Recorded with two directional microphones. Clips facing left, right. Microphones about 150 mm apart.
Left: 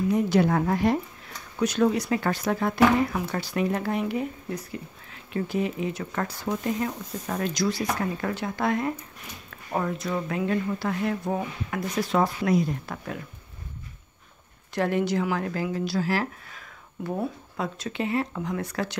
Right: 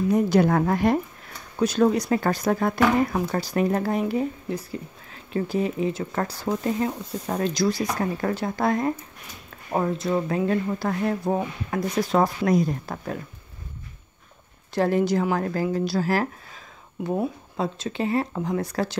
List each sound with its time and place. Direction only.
0.1 s a woman's voice: 45° right (ahead or behind)
1.6 s speech: 35° right (ahead or behind)
9.7 s speech: 25° right (ahead or behind)
14.7 s speech: 35° right (ahead or behind)
16.5 s speech: 20° right (ahead or behind); by 18.9 s 35° right (ahead or behind)